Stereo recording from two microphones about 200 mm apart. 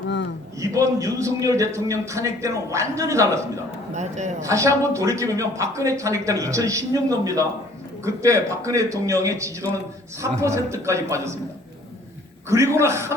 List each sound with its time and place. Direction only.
0.6 s a man's voice: 15° right (ahead or behind)
3.9 s speech: 35° right (ahead or behind)
4.4 s a man's voice: 15° right (ahead or behind)
12.5 s a man's voice: 15° right (ahead or behind)